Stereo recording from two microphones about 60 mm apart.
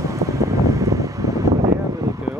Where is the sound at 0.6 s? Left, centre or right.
Right.